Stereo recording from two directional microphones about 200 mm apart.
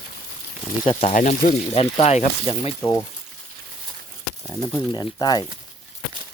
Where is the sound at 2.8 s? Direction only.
15° left (ahead or behind).